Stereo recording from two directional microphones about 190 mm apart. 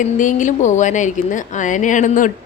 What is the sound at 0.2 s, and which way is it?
A woman's voice, 40° left (ahead or behind).